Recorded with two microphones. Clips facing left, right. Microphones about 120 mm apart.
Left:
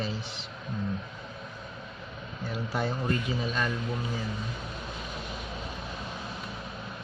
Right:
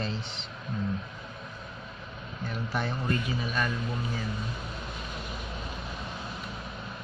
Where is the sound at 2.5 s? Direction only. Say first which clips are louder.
Left 2 dB; 15° left (ahead or behind).